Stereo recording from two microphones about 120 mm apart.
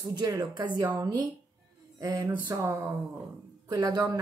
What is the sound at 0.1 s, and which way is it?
Speech, 35° right (ahead or behind).